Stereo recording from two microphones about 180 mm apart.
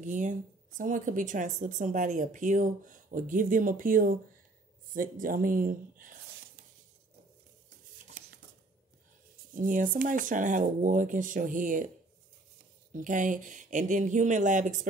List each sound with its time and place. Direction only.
0.0 s speech: 45° right (ahead or behind)
9.6 s speech: 45° right (ahead or behind)
12.9 s speech: 45° right (ahead or behind)